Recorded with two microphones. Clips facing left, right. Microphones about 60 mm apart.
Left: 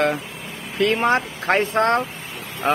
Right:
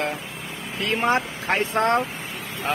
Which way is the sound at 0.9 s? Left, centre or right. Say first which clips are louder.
Right 1 dB; left.